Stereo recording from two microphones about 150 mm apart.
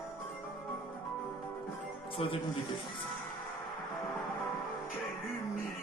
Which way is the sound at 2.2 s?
40° left (ahead or behind).